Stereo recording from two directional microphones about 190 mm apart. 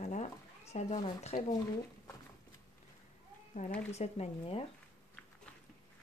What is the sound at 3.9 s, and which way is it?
Speech, 35° left (ahead or behind).